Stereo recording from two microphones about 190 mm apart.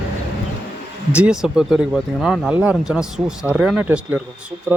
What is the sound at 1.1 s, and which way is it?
Speech, 5° right (ahead or behind).